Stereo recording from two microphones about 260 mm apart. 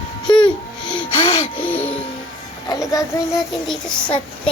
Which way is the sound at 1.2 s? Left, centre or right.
Centre.